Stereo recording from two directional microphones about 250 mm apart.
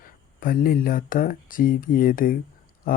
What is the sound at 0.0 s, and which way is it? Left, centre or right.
Speech, left.